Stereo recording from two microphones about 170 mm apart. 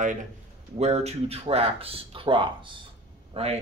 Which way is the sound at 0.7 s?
40° right (ahead or behind).